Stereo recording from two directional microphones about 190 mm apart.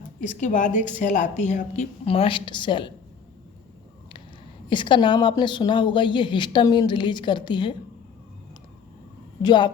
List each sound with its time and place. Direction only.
0.2 s a woman's voice: 40° left (ahead or behind); by 2.9 s 25° left (ahead or behind)
4.7 s speech: 25° left (ahead or behind)
9.4 s speech: 25° left (ahead or behind)